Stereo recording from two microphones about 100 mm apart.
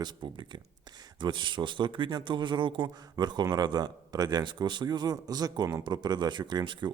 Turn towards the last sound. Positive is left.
turn(degrees=-50)  # may be behind; listen again after turning